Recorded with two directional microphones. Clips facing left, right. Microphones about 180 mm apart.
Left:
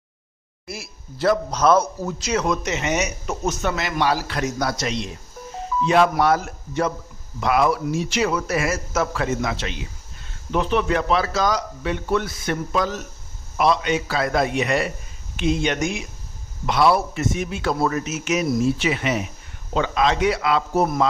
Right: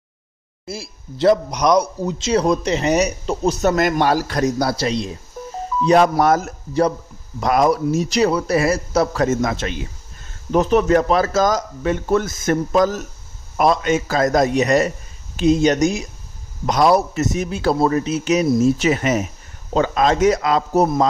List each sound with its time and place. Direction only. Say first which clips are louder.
0.7 s a man's voice: right 4 dB; 25° right (ahead or behind)